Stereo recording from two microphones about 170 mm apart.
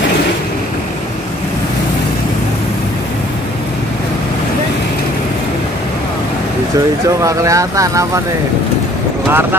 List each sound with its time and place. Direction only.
7.2 s speech: 20° right (ahead or behind)
9.3 s speech: 10° right (ahead or behind)